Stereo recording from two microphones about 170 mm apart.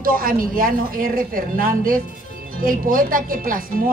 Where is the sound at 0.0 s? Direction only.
55° right (ahead or behind).